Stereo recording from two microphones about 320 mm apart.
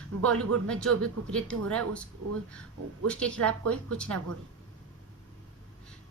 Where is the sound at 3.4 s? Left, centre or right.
Right.